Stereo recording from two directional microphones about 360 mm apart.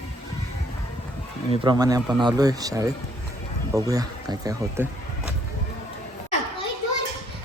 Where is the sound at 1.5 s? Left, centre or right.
Centre.